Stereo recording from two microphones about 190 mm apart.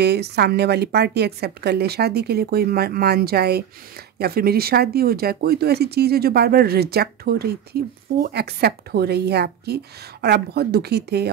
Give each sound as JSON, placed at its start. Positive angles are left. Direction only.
{"t": 0.0, "sound": "speech", "side_deg": -60}